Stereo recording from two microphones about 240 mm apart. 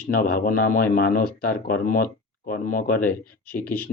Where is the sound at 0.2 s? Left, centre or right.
Left.